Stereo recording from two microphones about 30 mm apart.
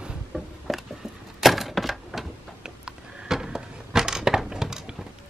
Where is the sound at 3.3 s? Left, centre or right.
Centre.